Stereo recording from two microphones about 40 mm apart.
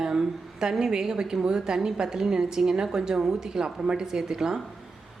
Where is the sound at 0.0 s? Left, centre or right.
Centre.